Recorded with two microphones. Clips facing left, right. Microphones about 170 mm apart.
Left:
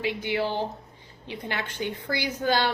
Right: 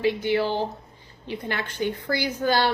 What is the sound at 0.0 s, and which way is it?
A woman's voice, 15° left (ahead or behind).